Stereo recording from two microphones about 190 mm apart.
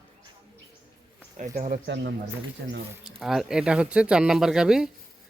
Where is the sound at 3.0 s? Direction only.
Centre (ahead or behind).